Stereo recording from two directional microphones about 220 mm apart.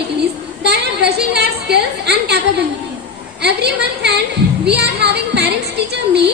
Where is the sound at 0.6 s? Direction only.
50° right (ahead or behind).